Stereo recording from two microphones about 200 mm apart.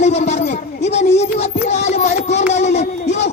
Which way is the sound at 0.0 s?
35° left (ahead or behind).